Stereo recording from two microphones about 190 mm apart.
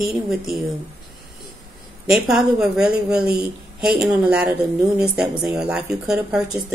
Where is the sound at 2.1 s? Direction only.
5° right (ahead or behind).